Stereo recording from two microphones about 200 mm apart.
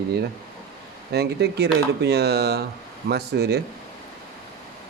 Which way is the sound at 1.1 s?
55° right (ahead or behind).